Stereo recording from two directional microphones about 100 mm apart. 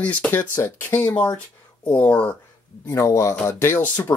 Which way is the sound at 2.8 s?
30° left (ahead or behind).